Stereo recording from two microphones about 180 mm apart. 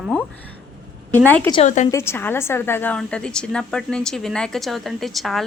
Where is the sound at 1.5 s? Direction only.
40° left (ahead or behind).